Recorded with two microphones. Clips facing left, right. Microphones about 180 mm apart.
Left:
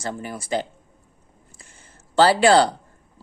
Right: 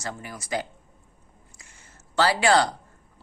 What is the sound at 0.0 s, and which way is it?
Speech, 30° left (ahead or behind).